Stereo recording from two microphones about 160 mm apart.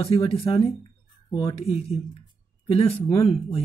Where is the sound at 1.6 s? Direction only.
40° left (ahead or behind).